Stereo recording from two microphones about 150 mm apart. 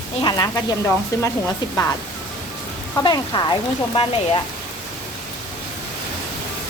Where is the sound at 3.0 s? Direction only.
30° left (ahead or behind).